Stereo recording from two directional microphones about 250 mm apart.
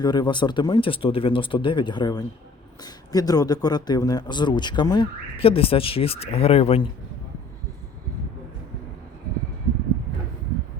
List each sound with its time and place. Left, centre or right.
0.0 s speech: centre